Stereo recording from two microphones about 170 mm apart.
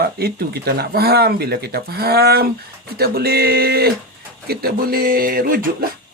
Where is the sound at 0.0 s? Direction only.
65° right (ahead or behind).